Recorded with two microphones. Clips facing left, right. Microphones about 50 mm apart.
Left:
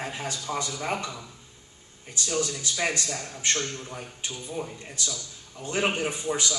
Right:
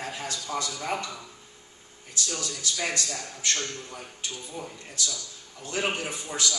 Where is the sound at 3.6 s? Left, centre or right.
Centre.